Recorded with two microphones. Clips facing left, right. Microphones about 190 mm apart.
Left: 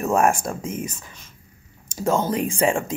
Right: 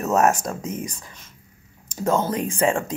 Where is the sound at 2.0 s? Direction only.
10° left (ahead or behind).